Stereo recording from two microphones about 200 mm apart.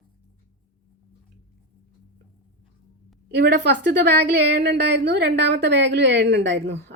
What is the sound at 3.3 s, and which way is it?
Speech, 55° right (ahead or behind).